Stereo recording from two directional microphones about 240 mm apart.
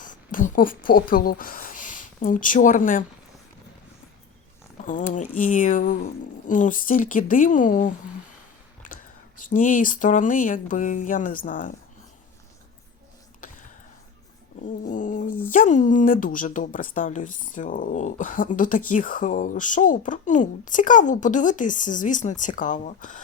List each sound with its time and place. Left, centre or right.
0.0 s speech: left
4.9 s speech: left
14.8 s speech: left